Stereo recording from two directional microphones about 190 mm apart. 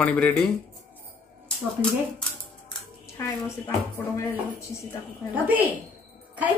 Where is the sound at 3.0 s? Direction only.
15° left (ahead or behind).